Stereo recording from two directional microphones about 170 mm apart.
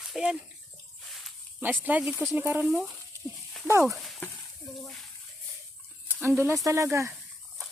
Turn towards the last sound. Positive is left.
turn(degrees=-15)  # may be behind; listen again after turning